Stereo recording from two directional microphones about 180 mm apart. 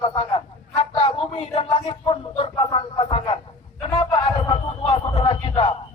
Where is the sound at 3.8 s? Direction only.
25° left (ahead or behind).